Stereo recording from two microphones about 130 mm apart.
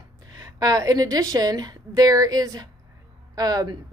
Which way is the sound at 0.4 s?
30° right (ahead or behind).